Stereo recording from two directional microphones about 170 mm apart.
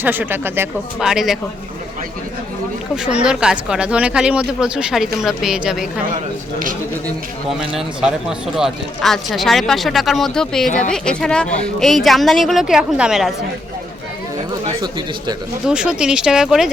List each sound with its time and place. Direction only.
0.0 s speech: 10° right (ahead or behind)
0.9 s speech: 5° right (ahead or behind)
2.9 s speech: 5° right (ahead or behind)
7.7 s speech: 5° right (ahead or behind)
15.6 s speech: 5° right (ahead or behind)